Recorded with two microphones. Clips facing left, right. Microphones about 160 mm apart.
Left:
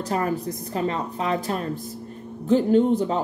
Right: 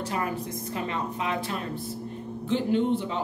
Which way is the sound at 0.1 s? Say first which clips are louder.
Left 8 dB; 40° left (ahead or behind).